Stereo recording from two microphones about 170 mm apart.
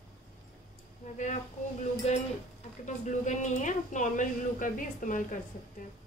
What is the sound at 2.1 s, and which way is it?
Speech, 40° left (ahead or behind).